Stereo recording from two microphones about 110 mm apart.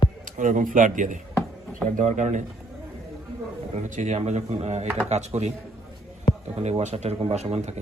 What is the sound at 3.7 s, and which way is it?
Speech, 90° right.